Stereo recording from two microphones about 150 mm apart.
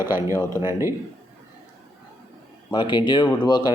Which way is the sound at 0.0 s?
15° right (ahead or behind).